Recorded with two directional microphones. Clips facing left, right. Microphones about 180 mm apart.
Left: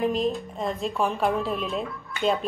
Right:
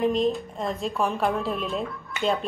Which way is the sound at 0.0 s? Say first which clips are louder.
Right 2 dB; centre (ahead or behind).